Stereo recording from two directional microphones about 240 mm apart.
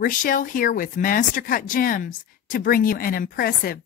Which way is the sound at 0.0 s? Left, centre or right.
Left.